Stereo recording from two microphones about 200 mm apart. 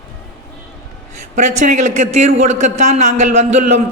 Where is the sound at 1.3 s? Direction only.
35° right (ahead or behind).